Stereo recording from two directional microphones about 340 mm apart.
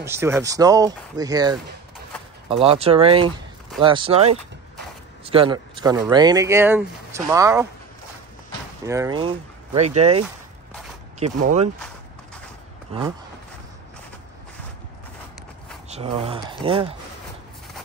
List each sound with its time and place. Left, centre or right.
0.0 s speech: centre
8.8 s speech: centre
15.9 s speech: centre